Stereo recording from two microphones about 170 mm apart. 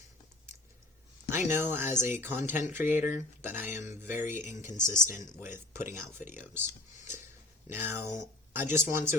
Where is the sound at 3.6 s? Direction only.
45° left (ahead or behind).